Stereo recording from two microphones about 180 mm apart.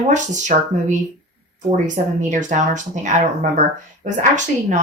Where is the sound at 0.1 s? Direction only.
45° right (ahead or behind).